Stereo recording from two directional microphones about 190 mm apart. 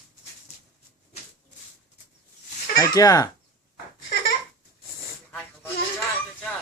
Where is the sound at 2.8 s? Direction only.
20° left (ahead or behind).